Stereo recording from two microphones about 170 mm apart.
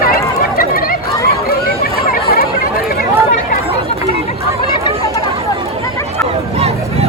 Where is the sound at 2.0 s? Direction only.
60° left (ahead or behind).